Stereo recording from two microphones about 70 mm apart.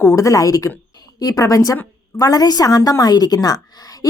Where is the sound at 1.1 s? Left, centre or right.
Left.